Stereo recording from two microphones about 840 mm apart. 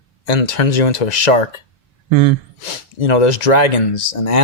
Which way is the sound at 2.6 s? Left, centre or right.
Left.